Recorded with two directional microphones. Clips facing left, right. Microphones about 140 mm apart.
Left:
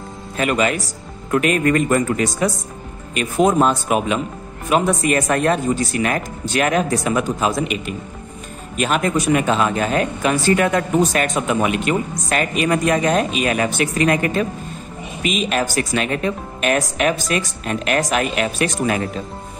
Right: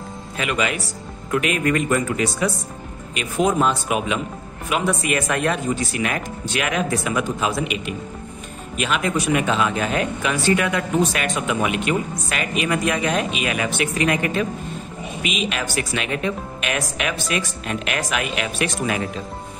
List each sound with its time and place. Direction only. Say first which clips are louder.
0.4 s speech: left 5 dB; 40° left (ahead or behind)